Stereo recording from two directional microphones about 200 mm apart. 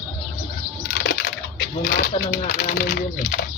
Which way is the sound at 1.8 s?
35° left (ahead or behind).